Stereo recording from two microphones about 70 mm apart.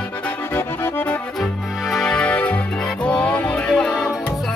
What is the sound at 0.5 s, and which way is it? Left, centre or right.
Music, left.